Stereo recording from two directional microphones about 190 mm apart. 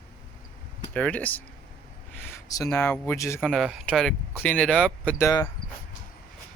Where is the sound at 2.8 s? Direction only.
15° left (ahead or behind).